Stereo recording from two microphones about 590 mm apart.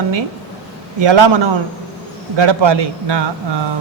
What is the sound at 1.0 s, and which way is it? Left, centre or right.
A man's voice, right.